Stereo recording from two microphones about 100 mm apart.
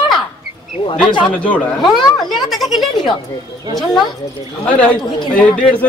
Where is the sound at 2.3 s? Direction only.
Centre (ahead or behind).